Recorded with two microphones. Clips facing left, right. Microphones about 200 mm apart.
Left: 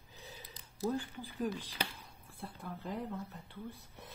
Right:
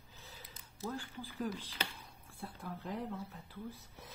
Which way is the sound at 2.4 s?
Centre (ahead or behind).